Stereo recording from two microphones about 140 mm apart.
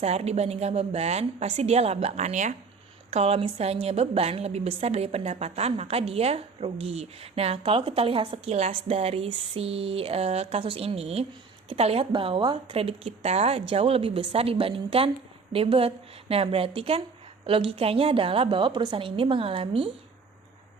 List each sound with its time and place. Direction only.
0.0 s a woman's voice: 50° right (ahead or behind)
3.1 s a woman's voice: 45° right (ahead or behind)